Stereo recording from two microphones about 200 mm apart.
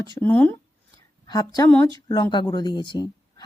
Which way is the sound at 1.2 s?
20° left (ahead or behind).